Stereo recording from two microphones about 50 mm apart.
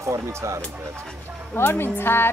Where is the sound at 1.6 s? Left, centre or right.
Left.